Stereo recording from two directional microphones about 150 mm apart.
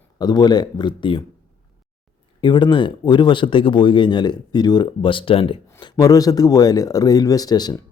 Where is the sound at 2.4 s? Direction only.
30° left (ahead or behind).